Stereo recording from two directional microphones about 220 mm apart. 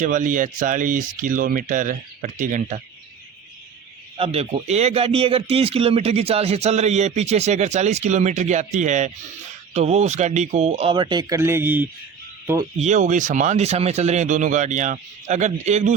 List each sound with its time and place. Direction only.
0.0 s speech: 35° right (ahead or behind)
4.2 s speech: 25° right (ahead or behind); by 11.9 s 10° right (ahead or behind)
12.8 s speech: 35° right (ahead or behind)